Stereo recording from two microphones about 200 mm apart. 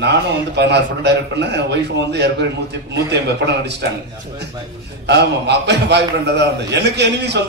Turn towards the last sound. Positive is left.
turn(degrees=-60)  # may be behind; listen again after turning